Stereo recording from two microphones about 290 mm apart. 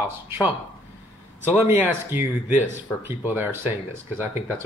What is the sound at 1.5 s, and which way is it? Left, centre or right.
Speech, centre.